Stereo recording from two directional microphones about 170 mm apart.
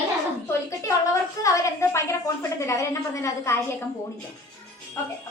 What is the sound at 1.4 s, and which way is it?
A woman's voice, 20° left (ahead or behind).